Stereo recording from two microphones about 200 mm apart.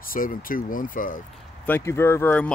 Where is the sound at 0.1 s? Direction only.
45° left (ahead or behind).